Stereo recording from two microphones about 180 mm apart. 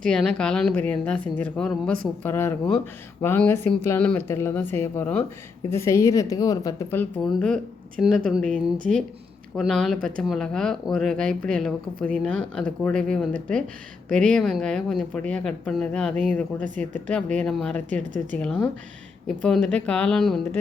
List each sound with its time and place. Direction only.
0.0 s a woman's voice: 5° left (ahead or behind)
18.0 s speech: 45° right (ahead or behind)
18.3 s a woman's voice: 5° left (ahead or behind)